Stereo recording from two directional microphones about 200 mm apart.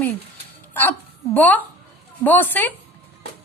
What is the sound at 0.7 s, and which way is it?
A woman's voice, 10° left (ahead or behind).